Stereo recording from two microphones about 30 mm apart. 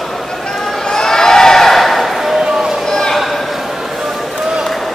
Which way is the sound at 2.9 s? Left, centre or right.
Left.